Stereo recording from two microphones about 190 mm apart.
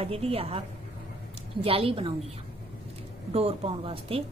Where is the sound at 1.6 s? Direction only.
30° right (ahead or behind).